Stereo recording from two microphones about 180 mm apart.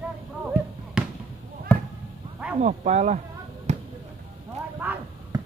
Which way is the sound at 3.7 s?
40° right (ahead or behind).